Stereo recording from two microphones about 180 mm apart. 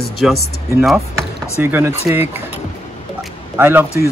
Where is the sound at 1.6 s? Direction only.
15° right (ahead or behind).